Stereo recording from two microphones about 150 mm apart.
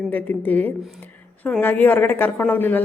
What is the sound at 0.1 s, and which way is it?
A woman's voice, 10° left (ahead or behind).